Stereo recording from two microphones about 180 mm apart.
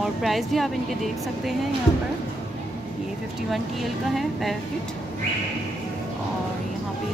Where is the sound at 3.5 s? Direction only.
Centre (ahead or behind).